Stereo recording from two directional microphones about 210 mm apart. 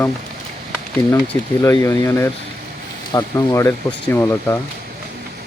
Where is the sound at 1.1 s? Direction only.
15° left (ahead or behind).